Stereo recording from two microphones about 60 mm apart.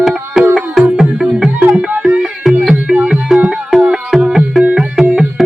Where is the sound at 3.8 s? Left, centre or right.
Centre.